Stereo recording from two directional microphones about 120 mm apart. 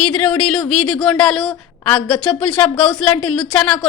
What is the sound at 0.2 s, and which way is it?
A woman's voice, 5° left (ahead or behind).